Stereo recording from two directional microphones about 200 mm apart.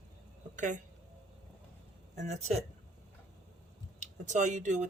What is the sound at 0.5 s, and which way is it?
Speech, 40° right (ahead or behind).